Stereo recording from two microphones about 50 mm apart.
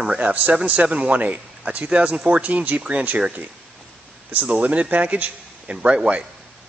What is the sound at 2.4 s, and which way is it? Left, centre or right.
Speech, right.